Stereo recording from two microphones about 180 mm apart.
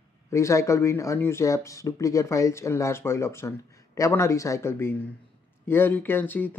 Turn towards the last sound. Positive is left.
turn(degrees=10)  # may be behind; listen again after turning